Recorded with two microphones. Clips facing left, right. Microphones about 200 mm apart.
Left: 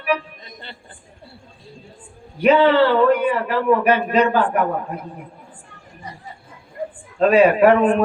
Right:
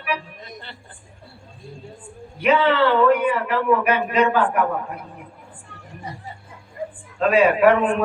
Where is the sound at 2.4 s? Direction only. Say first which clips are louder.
Left 4 dB; 35° left (ahead or behind).